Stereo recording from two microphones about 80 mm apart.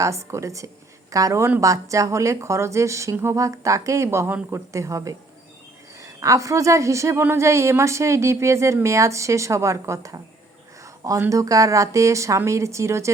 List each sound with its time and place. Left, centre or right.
0.0 s a woman's voice: right
11.3 s a woman's voice: right